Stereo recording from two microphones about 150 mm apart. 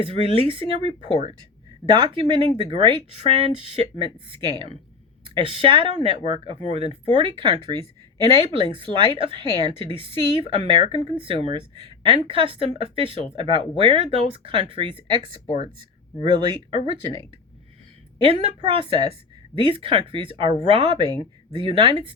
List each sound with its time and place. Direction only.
0.0 s speech: 40° right (ahead or behind)
18.2 s speech: 35° right (ahead or behind)